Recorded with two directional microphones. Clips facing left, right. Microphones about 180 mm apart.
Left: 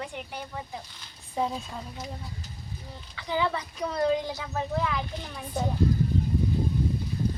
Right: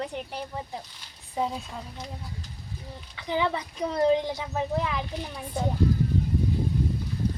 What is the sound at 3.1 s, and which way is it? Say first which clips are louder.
A woman's voice: right 1 dB; 20° right (ahead or behind).